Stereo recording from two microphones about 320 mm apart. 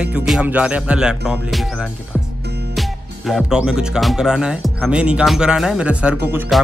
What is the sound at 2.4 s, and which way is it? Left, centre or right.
Music, right.